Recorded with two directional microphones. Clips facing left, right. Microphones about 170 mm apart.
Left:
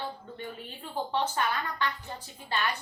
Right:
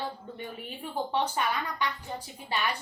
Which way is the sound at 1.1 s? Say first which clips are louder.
Even; 15° right (ahead or behind).